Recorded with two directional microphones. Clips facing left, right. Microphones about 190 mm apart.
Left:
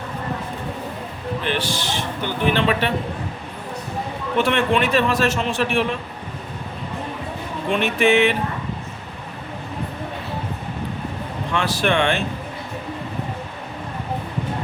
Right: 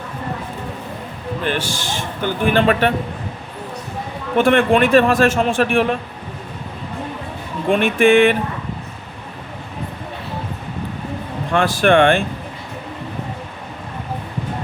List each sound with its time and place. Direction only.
1.5 s a man's voice: 45° right (ahead or behind)
4.4 s a man's voice: 50° right (ahead or behind)
7.7 s a man's voice: 50° right (ahead or behind)
11.5 s a man's voice: 50° right (ahead or behind)